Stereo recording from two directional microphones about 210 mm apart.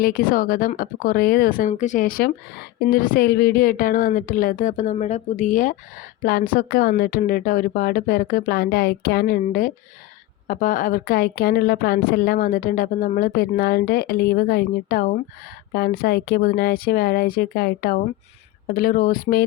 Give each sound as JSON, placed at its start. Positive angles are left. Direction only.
{"t": 0.0, "sound": "a woman's voice", "side_deg": 40}